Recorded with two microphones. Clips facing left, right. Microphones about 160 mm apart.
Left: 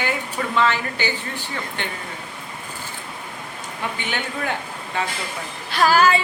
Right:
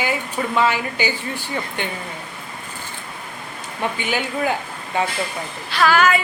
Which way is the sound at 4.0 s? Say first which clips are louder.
Right 6 dB; 10° right (ahead or behind).